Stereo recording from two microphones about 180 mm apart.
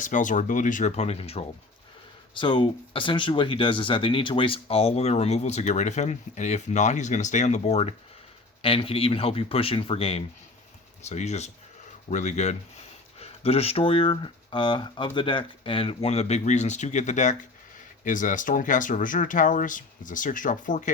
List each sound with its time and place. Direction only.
0.0 s speech: 45° left (ahead or behind)